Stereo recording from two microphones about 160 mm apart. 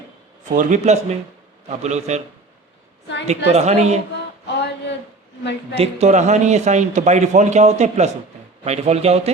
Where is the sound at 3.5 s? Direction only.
45° right (ahead or behind).